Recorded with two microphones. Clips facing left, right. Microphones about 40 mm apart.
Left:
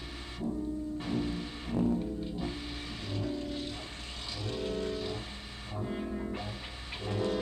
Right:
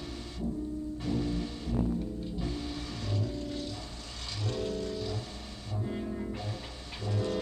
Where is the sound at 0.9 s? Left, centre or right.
Left.